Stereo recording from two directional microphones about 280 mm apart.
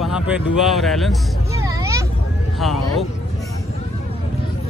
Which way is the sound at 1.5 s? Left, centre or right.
Centre.